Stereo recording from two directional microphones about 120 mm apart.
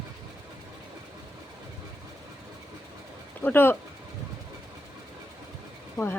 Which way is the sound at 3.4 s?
15° left (ahead or behind).